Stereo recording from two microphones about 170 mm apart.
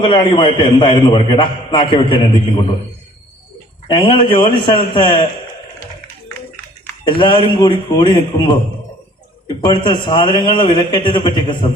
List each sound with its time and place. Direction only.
0.0 s a man's voice: 30° left (ahead or behind)
3.8 s a man's voice: 30° left (ahead or behind)
7.0 s a man's voice: 30° left (ahead or behind)
9.6 s a man's voice: 25° left (ahead or behind)